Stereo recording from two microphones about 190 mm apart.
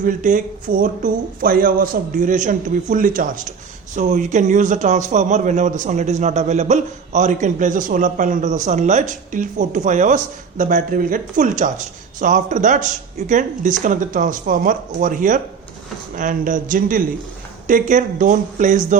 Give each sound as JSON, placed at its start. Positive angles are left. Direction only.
{"t": 0.0, "sound": "a man's voice", "side_deg": -45}